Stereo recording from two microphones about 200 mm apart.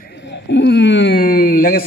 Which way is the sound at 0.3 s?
60° left (ahead or behind).